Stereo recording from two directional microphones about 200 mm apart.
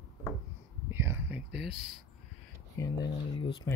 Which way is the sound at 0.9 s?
10° right (ahead or behind).